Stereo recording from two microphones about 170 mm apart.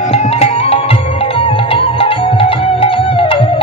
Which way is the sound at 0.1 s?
35° left (ahead or behind).